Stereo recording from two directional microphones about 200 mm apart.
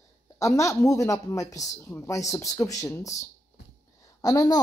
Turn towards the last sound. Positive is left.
turn(degrees=20)  # may be behind; listen again after turning